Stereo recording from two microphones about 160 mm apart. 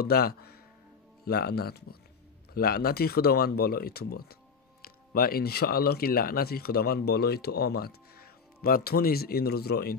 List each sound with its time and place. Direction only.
0.0 s speech: 75° left (ahead or behind)